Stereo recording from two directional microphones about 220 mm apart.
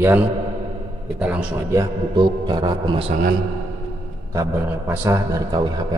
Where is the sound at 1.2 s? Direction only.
5° right (ahead or behind); by 3.1 s 25° right (ahead or behind).